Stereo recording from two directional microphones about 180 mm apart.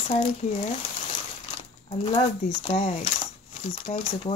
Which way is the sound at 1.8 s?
30° left (ahead or behind).